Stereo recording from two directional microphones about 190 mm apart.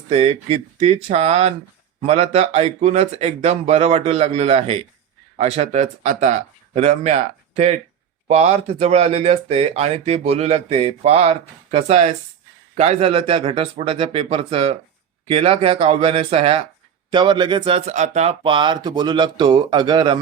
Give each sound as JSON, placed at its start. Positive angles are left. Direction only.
{"t": 0.1, "sound": "speech", "side_deg": -35}